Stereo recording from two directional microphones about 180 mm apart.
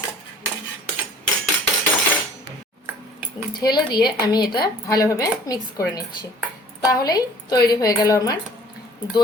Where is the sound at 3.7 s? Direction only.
25° left (ahead or behind).